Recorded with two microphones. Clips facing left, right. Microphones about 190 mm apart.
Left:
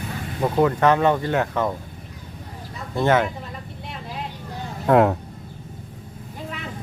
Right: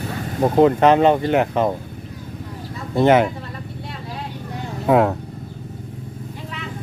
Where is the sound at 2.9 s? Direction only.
15° right (ahead or behind).